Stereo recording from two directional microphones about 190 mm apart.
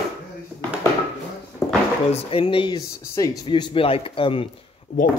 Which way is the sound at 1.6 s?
15° left (ahead or behind).